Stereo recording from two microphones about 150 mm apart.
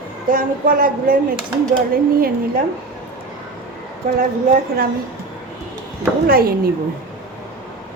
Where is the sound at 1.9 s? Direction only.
80° right.